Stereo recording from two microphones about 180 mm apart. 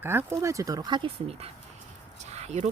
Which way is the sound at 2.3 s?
35° right (ahead or behind).